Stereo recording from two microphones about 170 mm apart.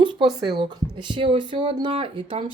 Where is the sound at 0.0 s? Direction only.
30° right (ahead or behind).